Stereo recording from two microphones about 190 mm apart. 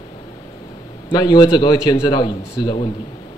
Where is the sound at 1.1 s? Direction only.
25° left (ahead or behind).